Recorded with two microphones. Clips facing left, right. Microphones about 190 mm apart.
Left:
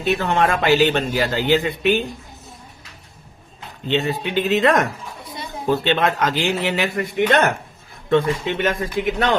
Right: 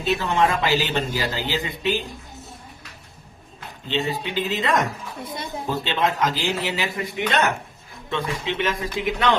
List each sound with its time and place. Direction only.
0.0 s speech: 60° left (ahead or behind)
3.8 s speech: 60° left (ahead or behind)